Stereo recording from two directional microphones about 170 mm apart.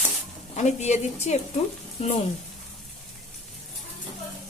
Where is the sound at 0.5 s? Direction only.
40° left (ahead or behind).